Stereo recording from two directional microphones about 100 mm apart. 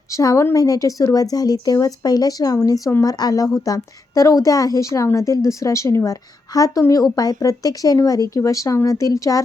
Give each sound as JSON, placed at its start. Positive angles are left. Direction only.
{"t": 0.1, "sound": "a woman's voice", "side_deg": 35}